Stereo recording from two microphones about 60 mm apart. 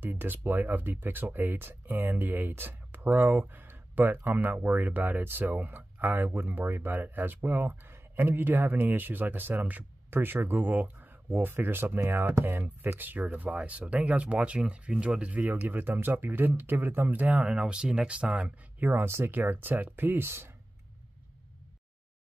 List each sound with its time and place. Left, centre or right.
0.0 s speech: right
12.4 s speech: right
15.4 s speech: right
18.9 s speech: right